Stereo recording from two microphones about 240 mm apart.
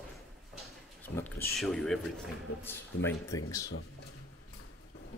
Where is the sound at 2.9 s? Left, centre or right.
Left.